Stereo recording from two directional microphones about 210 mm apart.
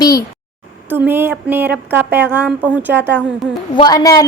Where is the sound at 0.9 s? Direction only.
10° right (ahead or behind).